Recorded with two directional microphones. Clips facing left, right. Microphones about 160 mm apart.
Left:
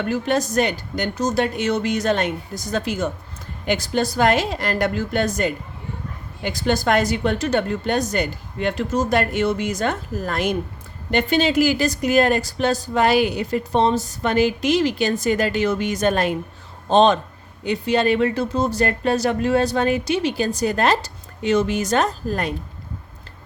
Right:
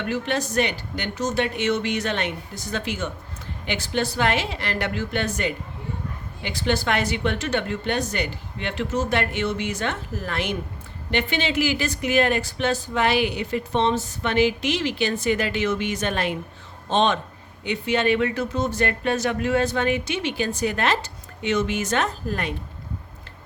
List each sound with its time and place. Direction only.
0.0 s speech: 40° left (ahead or behind)